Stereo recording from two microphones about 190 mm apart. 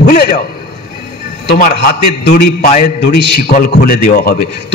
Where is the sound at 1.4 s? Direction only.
50° left (ahead or behind).